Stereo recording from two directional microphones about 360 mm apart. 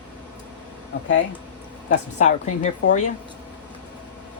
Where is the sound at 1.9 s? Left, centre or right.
Centre.